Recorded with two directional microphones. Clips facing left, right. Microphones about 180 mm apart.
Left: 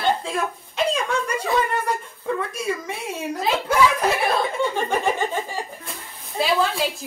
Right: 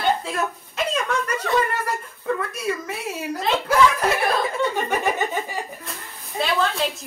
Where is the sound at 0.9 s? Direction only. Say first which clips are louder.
Even; 10° left (ahead or behind).